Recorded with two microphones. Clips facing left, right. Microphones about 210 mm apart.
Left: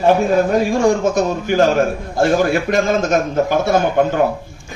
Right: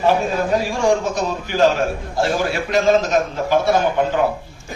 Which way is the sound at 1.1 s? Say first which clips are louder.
Left 6 dB; 50° left (ahead or behind).